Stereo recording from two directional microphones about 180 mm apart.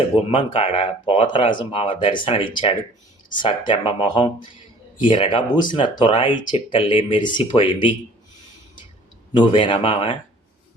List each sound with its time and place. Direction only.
0.3 s speech: 30° left (ahead or behind)
9.3 s speech: 25° left (ahead or behind)